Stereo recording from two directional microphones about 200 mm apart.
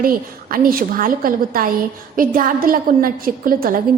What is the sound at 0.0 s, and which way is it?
A woman's voice, 45° right (ahead or behind).